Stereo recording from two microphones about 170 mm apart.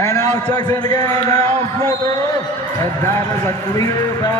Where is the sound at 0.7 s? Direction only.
20° left (ahead or behind).